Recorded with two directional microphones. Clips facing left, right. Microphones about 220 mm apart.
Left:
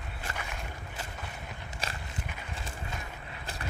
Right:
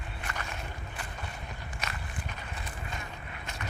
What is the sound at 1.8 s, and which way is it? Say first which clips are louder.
Walk: left 1 dB; 30° left (ahead or behind).